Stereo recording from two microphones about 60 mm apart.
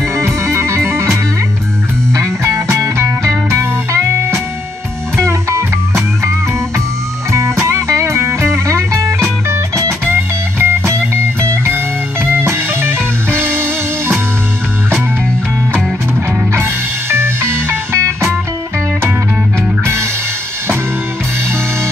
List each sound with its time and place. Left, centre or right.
0.1 s music: right
7.2 s music: right
10.0 s music: right
16.5 s music: right
19.8 s music: right